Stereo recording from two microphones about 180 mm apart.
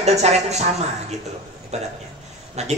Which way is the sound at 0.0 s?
40° right (ahead or behind).